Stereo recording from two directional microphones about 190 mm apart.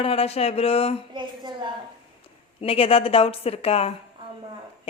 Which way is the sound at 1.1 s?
25° right (ahead or behind).